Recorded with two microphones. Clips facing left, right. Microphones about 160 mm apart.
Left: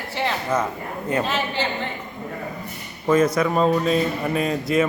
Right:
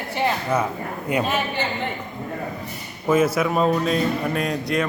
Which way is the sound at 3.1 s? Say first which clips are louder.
Left 1 dB; 5° right (ahead or behind).